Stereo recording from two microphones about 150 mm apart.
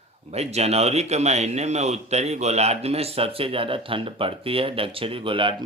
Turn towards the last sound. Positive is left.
turn(degrees=-35)  # may be behind; listen again after turning